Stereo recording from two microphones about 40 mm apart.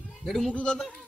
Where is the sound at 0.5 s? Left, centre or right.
Left.